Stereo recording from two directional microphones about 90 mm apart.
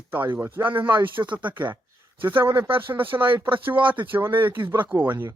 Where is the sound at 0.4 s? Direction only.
25° right (ahead or behind).